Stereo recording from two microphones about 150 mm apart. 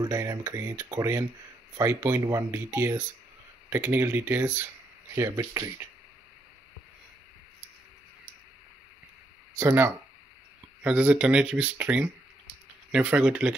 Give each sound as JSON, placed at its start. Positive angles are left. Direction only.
{"t": 0.0, "sound": "speech", "side_deg": -25}
{"t": 9.6, "sound": "speech", "side_deg": -15}